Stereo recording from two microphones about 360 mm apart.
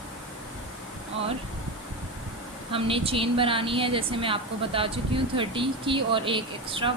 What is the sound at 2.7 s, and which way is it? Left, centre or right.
A woman's voice, centre.